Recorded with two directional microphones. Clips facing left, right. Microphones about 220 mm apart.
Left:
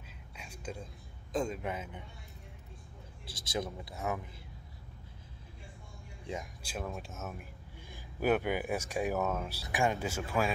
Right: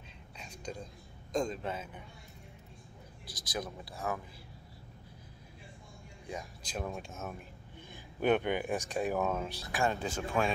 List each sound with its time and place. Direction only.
0.4 s whispering: 5° left (ahead or behind)
1.3 s speech: 10° left (ahead or behind)
3.3 s speech: 25° left (ahead or behind)
6.6 s speech: 5° left (ahead or behind)